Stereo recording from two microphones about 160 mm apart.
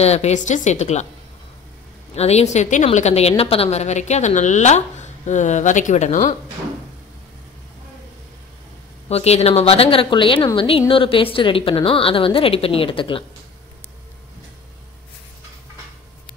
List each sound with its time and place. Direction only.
0.0 s a woman's voice: 40° left (ahead or behind)
2.1 s a woman's voice: 40° left (ahead or behind)
9.1 s a woman's voice: 40° left (ahead or behind)